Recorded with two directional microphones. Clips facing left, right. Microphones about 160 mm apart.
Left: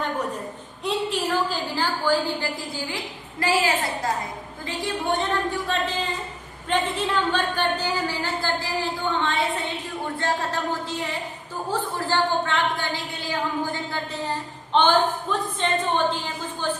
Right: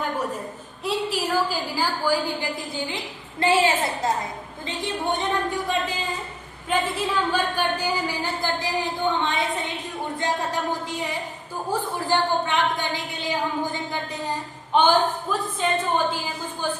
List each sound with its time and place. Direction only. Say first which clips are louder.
0.9 s a woman's voice: even; 5° right (ahead or behind)
3.4 s a woman's voice: right 3 dB; 25° right (ahead or behind)